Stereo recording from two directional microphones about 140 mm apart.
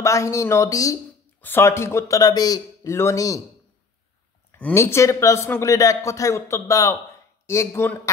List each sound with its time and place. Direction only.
0.0 s a man's voice: 20° left (ahead or behind)
4.5 s a man's voice: 15° left (ahead or behind)